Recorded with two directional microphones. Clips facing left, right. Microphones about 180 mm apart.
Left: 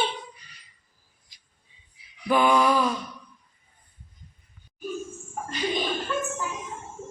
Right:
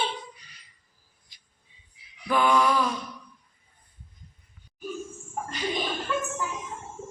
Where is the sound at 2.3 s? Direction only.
15° left (ahead or behind).